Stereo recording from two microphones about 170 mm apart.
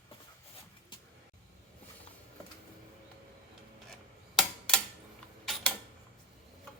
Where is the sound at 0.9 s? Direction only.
25° left (ahead or behind).